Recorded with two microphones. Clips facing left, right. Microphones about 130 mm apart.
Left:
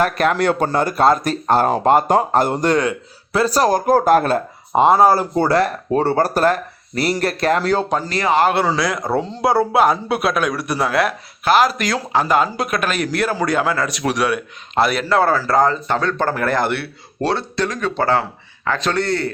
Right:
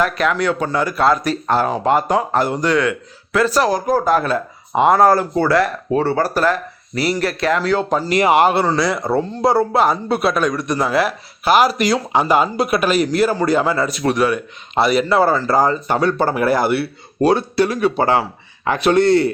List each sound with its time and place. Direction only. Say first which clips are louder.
0.0 s speech: left 1 dB; 50° left (ahead or behind)
4.8 s speech: even; 25° left (ahead or behind); by 7.9 s 45° left (ahead or behind)
8.1 s speech: right 4 dB; 20° right (ahead or behind)
8.4 s speech: right 1 dB; centre (ahead or behind); by 19.3 s 20° right (ahead or behind)